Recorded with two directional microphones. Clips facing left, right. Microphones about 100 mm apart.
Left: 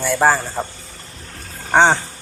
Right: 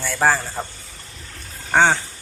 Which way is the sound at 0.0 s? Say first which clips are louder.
Left 3 dB; 15° left (ahead or behind).